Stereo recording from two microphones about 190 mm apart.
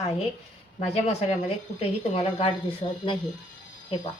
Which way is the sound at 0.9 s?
35° left (ahead or behind).